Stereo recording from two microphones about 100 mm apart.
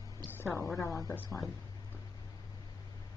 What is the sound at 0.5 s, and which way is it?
Speech, 30° left (ahead or behind).